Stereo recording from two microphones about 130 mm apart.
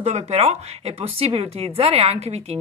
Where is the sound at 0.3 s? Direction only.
50° right (ahead or behind).